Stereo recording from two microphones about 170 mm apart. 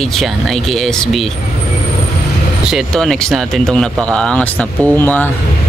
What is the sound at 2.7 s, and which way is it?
Speech, 5° left (ahead or behind).